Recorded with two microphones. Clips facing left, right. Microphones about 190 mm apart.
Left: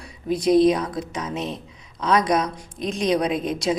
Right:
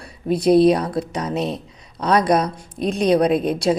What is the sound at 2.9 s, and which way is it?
Speech, 60° right (ahead or behind).